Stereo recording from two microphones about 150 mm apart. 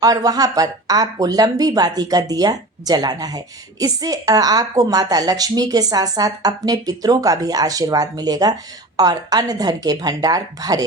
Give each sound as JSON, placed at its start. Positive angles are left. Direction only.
{"t": 0.0, "sound": "speech", "side_deg": -25}